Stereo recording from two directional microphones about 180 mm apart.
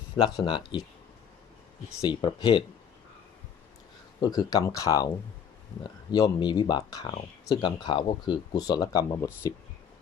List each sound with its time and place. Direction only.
0.4 s speech: 25° left (ahead or behind)
2.0 s speech: 25° left (ahead or behind)
4.2 s speech: 20° left (ahead or behind)
6.1 s speech: 20° left (ahead or behind)